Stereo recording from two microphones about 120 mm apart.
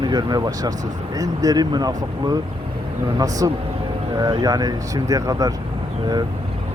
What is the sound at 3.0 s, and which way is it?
Speech, 30° right (ahead or behind).